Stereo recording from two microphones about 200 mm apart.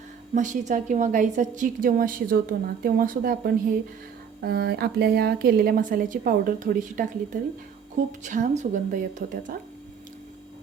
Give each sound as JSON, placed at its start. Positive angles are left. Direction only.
{"t": 0.3, "sound": "a woman's voice", "side_deg": -40}
{"t": 8.2, "sound": "a woman's voice", "side_deg": -35}